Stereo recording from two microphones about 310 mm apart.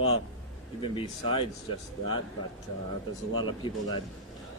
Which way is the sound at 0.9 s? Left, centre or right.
Centre.